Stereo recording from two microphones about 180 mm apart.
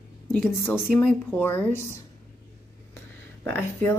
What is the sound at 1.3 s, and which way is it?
Speech, 10° left (ahead or behind).